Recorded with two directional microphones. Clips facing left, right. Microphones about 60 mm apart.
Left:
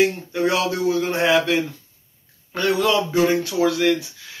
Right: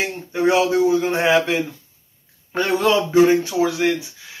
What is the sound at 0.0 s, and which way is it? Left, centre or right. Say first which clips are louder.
Speech: left 1 dB; right.